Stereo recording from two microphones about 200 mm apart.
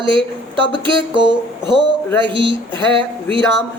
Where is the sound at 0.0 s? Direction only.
25° right (ahead or behind).